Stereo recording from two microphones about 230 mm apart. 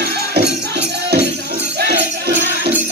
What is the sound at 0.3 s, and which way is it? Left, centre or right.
Music, right.